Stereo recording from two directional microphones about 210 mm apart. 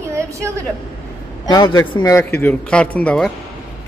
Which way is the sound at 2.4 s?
5° left (ahead or behind).